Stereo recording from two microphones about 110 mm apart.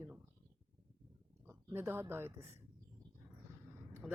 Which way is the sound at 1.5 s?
20° right (ahead or behind).